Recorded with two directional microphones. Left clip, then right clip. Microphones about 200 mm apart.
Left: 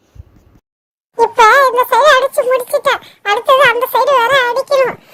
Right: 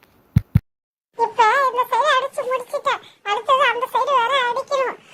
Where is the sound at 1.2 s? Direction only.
55° left (ahead or behind).